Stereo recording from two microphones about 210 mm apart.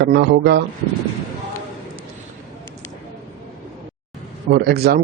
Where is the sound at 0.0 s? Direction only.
50° right (ahead or behind).